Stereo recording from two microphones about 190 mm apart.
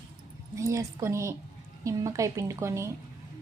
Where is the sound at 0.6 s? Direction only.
15° right (ahead or behind).